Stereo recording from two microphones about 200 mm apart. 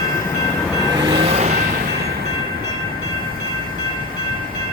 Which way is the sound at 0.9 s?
25° right (ahead or behind).